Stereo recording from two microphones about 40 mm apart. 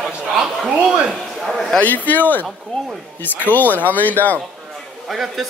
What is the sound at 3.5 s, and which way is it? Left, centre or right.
Speech, left.